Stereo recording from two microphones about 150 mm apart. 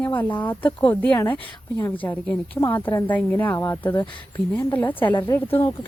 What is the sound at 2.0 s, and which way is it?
Speech, 15° left (ahead or behind).